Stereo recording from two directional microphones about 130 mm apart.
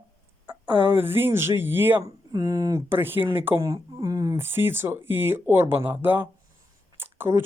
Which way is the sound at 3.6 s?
25° right (ahead or behind).